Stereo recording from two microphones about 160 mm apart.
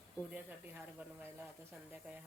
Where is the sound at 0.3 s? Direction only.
10° right (ahead or behind).